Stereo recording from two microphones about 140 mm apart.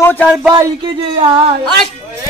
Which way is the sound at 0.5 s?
25° right (ahead or behind).